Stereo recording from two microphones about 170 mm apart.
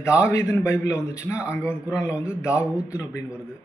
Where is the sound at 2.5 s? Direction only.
5° right (ahead or behind).